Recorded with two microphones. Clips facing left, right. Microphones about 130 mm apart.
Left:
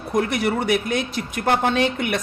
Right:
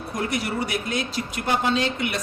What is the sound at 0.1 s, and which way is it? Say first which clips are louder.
A woman's voice: left 6 dB; 55° left (ahead or behind).